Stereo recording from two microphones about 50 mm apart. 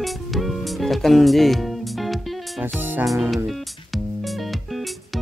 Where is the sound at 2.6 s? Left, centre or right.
Right.